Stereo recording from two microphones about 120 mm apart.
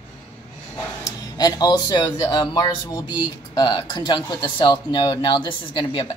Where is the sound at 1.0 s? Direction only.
25° left (ahead or behind).